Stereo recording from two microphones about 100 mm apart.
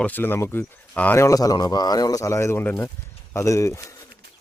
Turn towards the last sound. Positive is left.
turn(degrees=30)  # may be behind; listen again after turning